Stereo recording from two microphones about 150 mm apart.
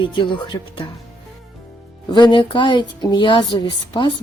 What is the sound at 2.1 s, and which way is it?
Speech, 30° left (ahead or behind).